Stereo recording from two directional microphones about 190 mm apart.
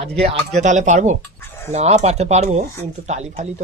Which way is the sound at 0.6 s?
40° right (ahead or behind).